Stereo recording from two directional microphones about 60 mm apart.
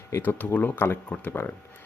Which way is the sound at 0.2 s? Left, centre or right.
Left.